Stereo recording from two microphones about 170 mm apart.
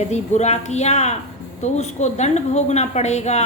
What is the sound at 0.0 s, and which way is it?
Speech, 40° left (ahead or behind).